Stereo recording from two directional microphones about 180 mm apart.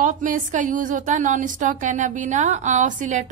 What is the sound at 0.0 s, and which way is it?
A woman's voice, 45° right (ahead or behind).